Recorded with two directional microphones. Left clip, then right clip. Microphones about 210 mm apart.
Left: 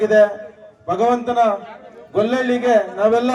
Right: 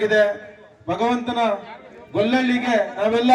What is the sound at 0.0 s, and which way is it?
A man's voice, 35° left (ahead or behind).